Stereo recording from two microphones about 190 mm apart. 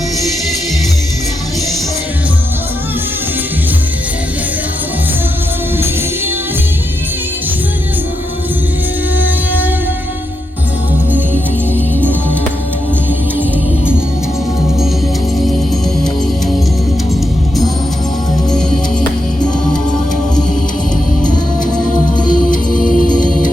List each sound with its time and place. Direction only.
9.1 s music: 10° right (ahead or behind)
22.7 s music: 45° left (ahead or behind)